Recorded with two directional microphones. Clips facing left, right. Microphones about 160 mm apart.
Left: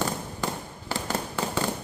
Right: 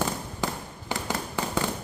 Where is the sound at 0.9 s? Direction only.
15° right (ahead or behind).